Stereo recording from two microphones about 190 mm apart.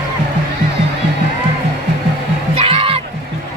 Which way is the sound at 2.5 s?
30° right (ahead or behind).